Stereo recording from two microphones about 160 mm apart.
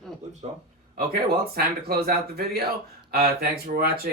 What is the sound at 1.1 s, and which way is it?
Speech, 75° right (ahead or behind).